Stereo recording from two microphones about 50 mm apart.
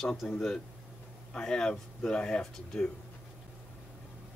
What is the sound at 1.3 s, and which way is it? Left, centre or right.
Speech, centre.